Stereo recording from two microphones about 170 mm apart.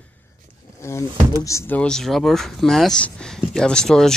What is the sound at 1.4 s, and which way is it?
Speech, 15° left (ahead or behind).